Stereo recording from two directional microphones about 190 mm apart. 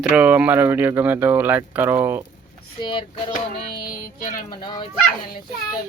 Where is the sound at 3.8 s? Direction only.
45° left (ahead or behind).